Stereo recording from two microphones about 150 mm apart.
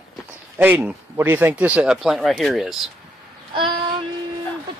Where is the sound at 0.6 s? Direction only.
10° right (ahead or behind).